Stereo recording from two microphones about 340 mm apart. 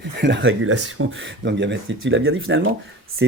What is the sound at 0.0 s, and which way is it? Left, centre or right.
Speech, right.